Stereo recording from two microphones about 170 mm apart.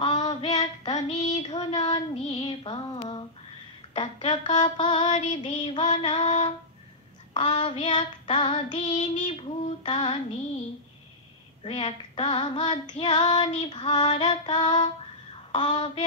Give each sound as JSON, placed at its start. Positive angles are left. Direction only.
{"t": 0.0, "sound": "female singing", "side_deg": 35}
{"t": 3.9, "sound": "a woman's voice", "side_deg": 30}
{"t": 4.6, "sound": "child singing", "side_deg": 25}
{"t": 5.1, "sound": "music", "side_deg": 45}
{"t": 5.5, "sound": "female singing", "side_deg": 30}
{"t": 7.3, "sound": "child singing", "side_deg": 30}
{"t": 9.2, "sound": "female singing", "side_deg": 30}
{"t": 11.6, "sound": "child singing", "side_deg": 35}
{"t": 13.3, "sound": "female singing", "side_deg": 40}
{"t": 13.6, "sound": "child singing", "side_deg": 25}